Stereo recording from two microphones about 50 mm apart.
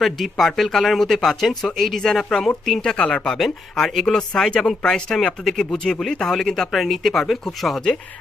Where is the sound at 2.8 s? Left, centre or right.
Centre.